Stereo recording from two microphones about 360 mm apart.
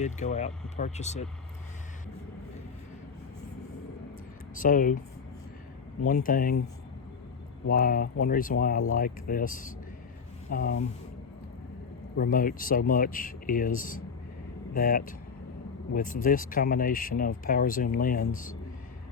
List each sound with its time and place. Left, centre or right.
0.0 s speech: centre
4.5 s speech: left
6.2 s speech: left
7.7 s speech: left
12.1 s speech: left